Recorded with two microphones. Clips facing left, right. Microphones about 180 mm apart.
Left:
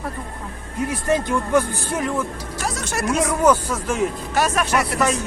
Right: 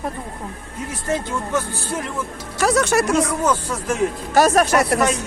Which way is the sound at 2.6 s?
70° right (ahead or behind).